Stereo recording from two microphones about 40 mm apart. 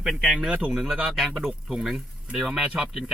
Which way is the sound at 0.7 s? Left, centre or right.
Centre.